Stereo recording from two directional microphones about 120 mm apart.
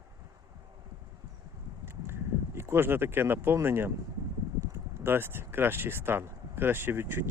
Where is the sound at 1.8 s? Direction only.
20° right (ahead or behind).